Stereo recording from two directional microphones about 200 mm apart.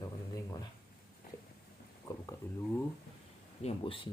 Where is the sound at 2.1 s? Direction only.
20° left (ahead or behind).